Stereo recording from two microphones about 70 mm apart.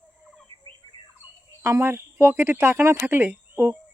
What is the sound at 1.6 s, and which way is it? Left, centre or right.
Speech, right.